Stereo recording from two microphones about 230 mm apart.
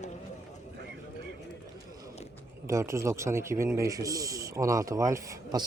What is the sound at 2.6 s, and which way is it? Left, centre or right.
A man's voice, centre.